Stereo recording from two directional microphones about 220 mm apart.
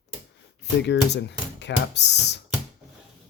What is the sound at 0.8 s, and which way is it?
Speech, 50° left (ahead or behind).